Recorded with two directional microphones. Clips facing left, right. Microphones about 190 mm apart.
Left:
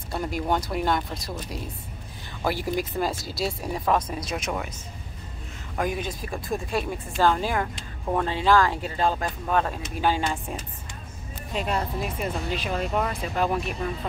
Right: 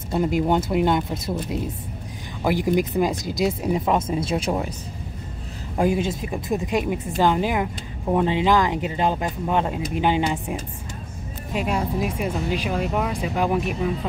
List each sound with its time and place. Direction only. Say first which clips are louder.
0.1 s speech: right 6 dB; 20° right (ahead or behind)
2.4 s speech: right 6 dB; 15° right (ahead or behind)
5.8 s speech: right 7 dB; 25° right (ahead or behind); by 13.9 s 10° right (ahead or behind)